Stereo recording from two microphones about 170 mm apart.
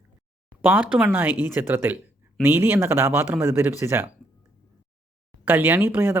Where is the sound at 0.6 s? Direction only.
10° right (ahead or behind).